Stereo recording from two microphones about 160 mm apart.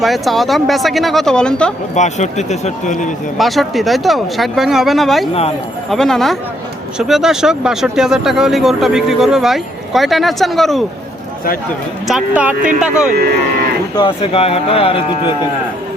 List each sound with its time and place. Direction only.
0.0 s speech: centre (ahead or behind)
2.0 s speech: 45° left (ahead or behind)
3.3 s speech: centre (ahead or behind)
12.0 s speech: 5° right (ahead or behind)
13.9 s speech: 35° left (ahead or behind)